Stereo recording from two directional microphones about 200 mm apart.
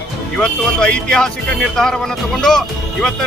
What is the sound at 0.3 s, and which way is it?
Speech, 5° left (ahead or behind).